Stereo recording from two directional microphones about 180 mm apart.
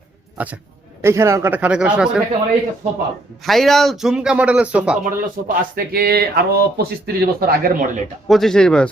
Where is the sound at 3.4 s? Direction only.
Centre (ahead or behind).